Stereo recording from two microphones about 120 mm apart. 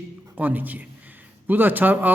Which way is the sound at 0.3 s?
15° right (ahead or behind).